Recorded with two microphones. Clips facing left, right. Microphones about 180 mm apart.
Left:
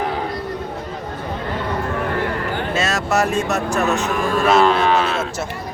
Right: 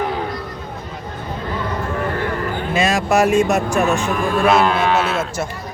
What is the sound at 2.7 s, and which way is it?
Speech, 15° right (ahead or behind).